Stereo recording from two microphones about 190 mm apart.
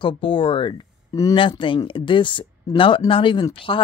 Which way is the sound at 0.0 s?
25° left (ahead or behind).